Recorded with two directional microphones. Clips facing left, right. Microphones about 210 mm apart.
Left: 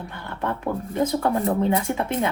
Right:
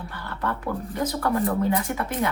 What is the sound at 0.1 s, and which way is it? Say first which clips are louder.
Speech: left 1 dB; 20° left (ahead or behind).